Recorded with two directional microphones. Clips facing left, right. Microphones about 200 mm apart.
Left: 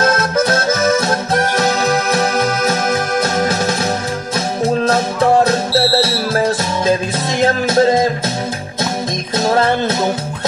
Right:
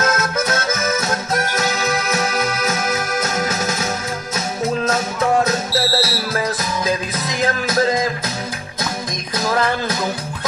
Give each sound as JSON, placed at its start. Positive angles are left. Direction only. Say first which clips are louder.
{"t": 0.0, "sound": "accordion", "louder": "left 5 dB", "side_deg": 30}
{"t": 4.8, "sound": "music", "louder": "left 5 dB", "side_deg": 30}
{"t": 9.4, "sound": "music", "louder": "left 5 dB", "side_deg": 30}